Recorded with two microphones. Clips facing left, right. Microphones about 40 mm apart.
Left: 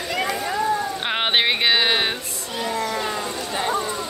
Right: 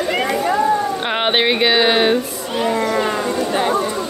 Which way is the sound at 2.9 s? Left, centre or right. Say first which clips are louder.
Right 7 dB; right.